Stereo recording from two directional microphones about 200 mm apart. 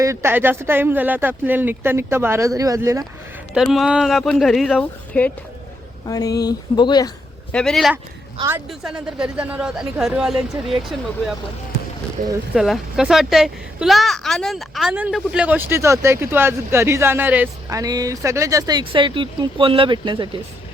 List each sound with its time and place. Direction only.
0.0 s a woman's voice: 15° right (ahead or behind)
3.5 s speech: centre (ahead or behind)
6.1 s speech: 20° left (ahead or behind)
7.5 s speech: centre (ahead or behind)
12.5 s a woman's voice: centre (ahead or behind); by 20.3 s 25° right (ahead or behind)